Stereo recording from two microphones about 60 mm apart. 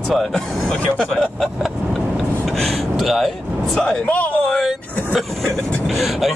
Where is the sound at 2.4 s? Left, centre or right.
Centre.